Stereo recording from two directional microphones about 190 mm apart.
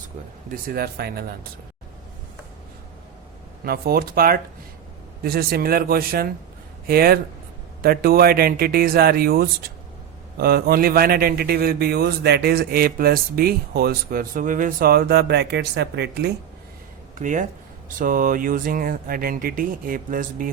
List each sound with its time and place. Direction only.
0.5 s speech: 55° right (ahead or behind)
3.6 s a man's voice: 55° right (ahead or behind)
17.2 s a man's voice: 40° right (ahead or behind)